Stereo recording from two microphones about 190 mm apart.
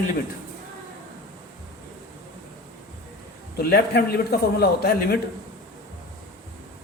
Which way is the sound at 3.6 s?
55° left (ahead or behind).